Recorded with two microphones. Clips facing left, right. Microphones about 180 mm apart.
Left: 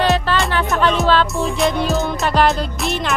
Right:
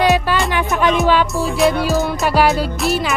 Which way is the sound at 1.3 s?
Centre (ahead or behind).